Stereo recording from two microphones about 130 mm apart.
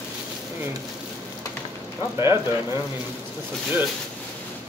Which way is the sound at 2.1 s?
25° right (ahead or behind).